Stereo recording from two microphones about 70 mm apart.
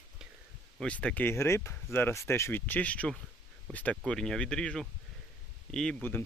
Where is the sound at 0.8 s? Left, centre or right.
Centre.